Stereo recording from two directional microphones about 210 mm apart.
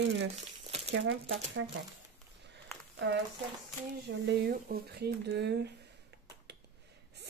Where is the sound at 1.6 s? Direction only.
75° right (ahead or behind).